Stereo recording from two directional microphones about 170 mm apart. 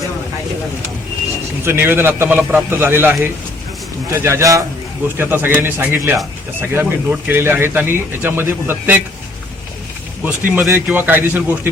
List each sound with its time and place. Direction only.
1.6 s speech: 10° right (ahead or behind)
10.2 s speech: 10° right (ahead or behind)